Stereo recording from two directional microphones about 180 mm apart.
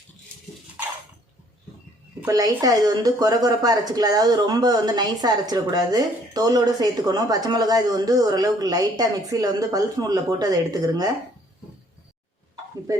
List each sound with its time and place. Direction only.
2.2 s speech: 20° right (ahead or behind)